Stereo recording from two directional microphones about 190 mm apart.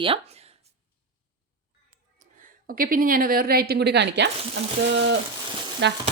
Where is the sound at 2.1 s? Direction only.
45° right (ahead or behind); by 4.3 s 65° right (ahead or behind).